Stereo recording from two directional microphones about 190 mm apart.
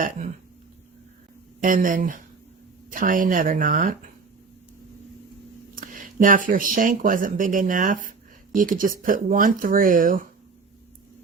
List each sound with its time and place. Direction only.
1.6 s speech: 45° right (ahead or behind)
5.7 s speech: 45° right (ahead or behind)